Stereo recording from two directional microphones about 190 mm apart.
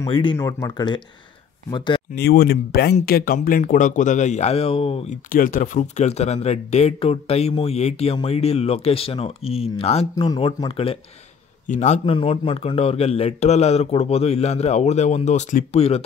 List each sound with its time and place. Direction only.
0.0 s speech: 25° left (ahead or behind)
2.1 s speech: 55° left (ahead or behind); by 5.0 s 30° left (ahead or behind)
5.3 s speech: 45° left (ahead or behind)
10.1 s a man's voice: 20° left (ahead or behind); by 12.0 s 40° left (ahead or behind)
12.1 s speech: 25° left (ahead or behind)